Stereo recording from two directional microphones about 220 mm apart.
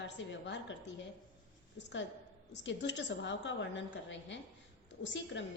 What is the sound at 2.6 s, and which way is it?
A woman's voice, 55° left (ahead or behind).